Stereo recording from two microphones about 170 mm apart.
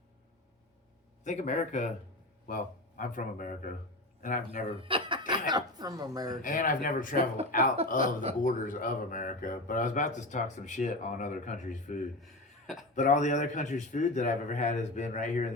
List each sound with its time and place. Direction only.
1.2 s speech: 45° left (ahead or behind)
3.0 s speech: 50° left (ahead or behind)
4.8 s speech: 30° right (ahead or behind)
6.3 s speech: 55° left (ahead or behind)
8.0 s speech: 35° right (ahead or behind)
8.4 s speech: 50° left (ahead or behind)
12.2 s chuckle: centre (ahead or behind)
13.0 s speech: 45° left (ahead or behind)